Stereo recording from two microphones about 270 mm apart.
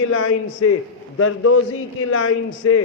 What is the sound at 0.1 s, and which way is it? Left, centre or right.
Speech, left.